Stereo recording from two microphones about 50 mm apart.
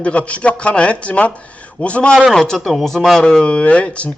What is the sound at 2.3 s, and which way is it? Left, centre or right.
Speech, centre.